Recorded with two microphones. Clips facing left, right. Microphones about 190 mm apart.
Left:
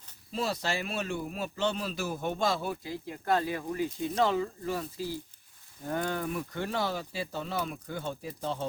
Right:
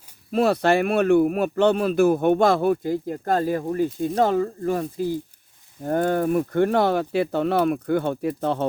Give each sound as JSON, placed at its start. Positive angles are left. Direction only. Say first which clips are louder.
{"t": 0.3, "sound": "speech", "louder": "right 13 dB", "side_deg": -60}